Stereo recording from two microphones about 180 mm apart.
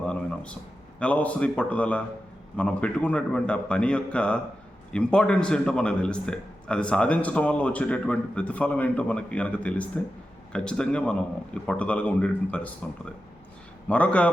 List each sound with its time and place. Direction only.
0.0 s a sound: 5° left (ahead or behind)
0.9 s a man's voice: 5° left (ahead or behind)
13.8 s a man's voice: 5° left (ahead or behind)